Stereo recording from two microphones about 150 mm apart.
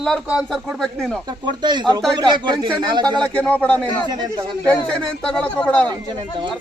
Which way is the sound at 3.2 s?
10° left (ahead or behind).